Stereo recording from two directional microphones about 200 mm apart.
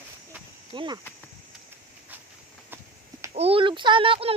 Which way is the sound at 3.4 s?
30° right (ahead or behind).